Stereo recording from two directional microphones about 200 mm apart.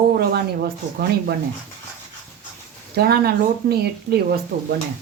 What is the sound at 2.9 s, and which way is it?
Speech, 50° right (ahead or behind).